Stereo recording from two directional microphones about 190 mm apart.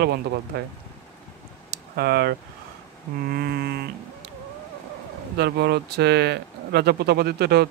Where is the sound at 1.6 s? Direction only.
55° right (ahead or behind).